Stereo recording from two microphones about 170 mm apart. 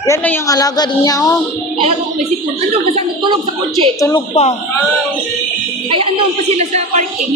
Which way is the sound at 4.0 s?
20° left (ahead or behind).